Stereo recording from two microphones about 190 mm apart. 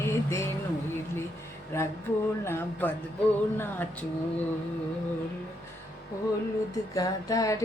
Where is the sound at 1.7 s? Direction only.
15° left (ahead or behind).